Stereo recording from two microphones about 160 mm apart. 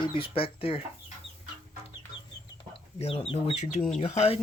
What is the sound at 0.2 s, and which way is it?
Speech, 35° left (ahead or behind).